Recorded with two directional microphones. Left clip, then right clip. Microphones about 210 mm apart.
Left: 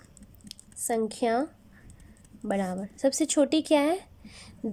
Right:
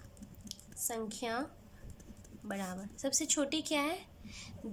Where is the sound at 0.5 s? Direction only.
35° left (ahead or behind).